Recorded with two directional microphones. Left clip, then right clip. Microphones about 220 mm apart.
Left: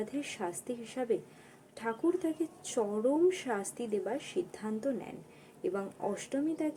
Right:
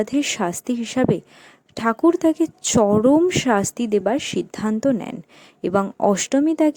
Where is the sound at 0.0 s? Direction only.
50° right (ahead or behind).